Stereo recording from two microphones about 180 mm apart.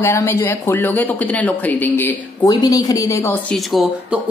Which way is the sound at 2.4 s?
20° left (ahead or behind).